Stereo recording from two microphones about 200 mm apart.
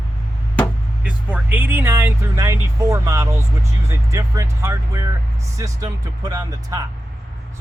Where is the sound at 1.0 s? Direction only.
10° right (ahead or behind).